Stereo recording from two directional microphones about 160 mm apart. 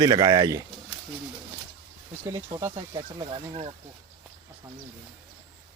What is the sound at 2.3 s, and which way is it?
Speech, 20° right (ahead or behind).